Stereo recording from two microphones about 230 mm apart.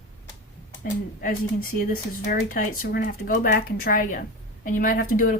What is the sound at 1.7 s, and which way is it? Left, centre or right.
Speech, left.